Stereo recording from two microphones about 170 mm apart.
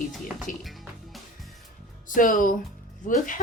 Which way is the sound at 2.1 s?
50° left (ahead or behind).